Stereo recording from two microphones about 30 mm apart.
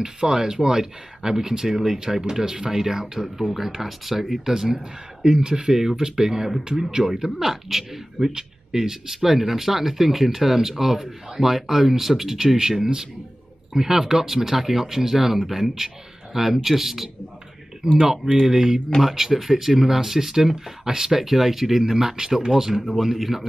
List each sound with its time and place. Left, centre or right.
0.0 s speech: right
5.8 s speech: centre
7.1 s speech: centre
8.3 s speech: right